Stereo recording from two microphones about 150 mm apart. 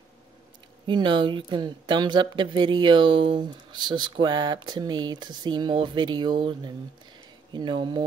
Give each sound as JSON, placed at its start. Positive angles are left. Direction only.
{"t": 0.8, "sound": "speech", "side_deg": -30}